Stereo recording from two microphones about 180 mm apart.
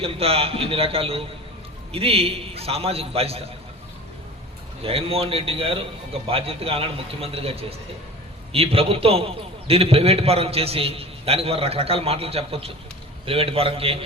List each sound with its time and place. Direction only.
0.0 s a man's voice: 30° right (ahead or behind)
4.8 s a man's voice: 30° right (ahead or behind)